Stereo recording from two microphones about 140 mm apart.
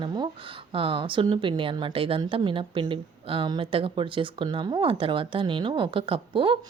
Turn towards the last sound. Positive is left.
turn(degrees=-40)  # may be behind; listen again after turning